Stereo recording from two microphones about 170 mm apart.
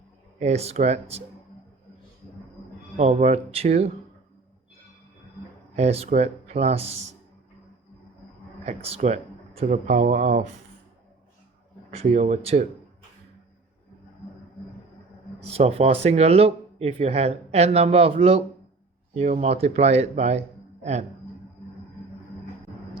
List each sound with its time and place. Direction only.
0.3 s speech: 40° right (ahead or behind)
3.0 s speech: 40° right (ahead or behind)
5.7 s speech: 40° right (ahead or behind)
8.6 s speech: 35° right (ahead or behind)
11.9 s speech: 40° right (ahead or behind)
15.5 s speech: 35° right (ahead or behind)